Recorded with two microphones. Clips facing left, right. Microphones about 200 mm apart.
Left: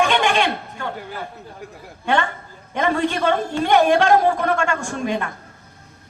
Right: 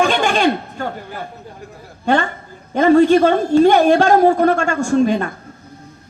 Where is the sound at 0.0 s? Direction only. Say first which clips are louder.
Right 3 dB; 40° right (ahead or behind).